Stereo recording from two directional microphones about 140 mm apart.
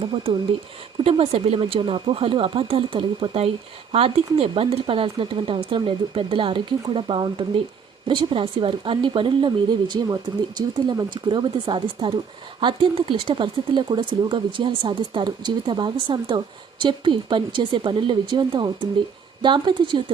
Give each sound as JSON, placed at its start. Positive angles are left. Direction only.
{"t": 0.0, "sound": "speech", "side_deg": -40}